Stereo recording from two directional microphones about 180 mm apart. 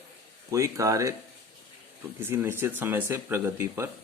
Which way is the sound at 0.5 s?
15° right (ahead or behind).